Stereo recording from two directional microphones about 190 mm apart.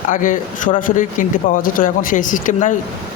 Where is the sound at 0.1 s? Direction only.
45° left (ahead or behind).